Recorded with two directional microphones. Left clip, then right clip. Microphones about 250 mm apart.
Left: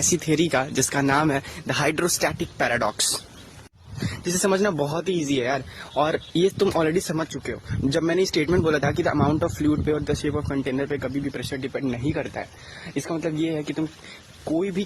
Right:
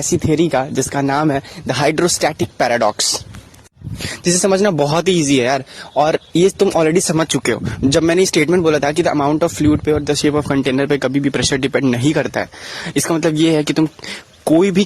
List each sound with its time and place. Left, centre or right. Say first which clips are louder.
0.0 s speech: right 6 dB; right
4.2 s speech: right 8 dB; right